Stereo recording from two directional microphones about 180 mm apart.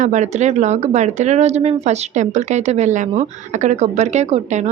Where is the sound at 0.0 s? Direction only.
40° right (ahead or behind).